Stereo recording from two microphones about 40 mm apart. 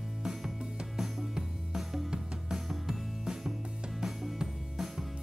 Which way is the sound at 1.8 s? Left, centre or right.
Centre.